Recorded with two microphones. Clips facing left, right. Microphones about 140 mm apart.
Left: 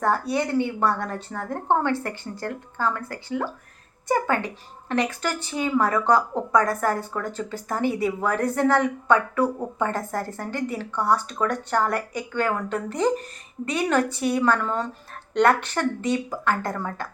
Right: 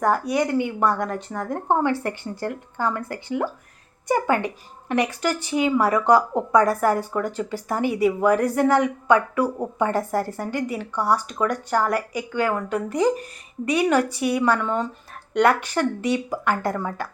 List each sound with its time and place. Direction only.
0.0 s speech: 15° right (ahead or behind)